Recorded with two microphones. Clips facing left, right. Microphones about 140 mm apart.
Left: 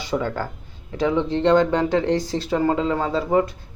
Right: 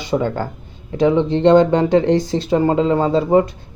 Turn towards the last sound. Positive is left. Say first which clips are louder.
# right 6 dB
turn(degrees=-25)  # may be behind; listen again after turning